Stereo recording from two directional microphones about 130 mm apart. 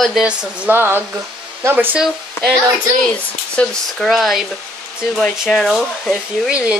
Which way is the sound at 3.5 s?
Centre (ahead or behind).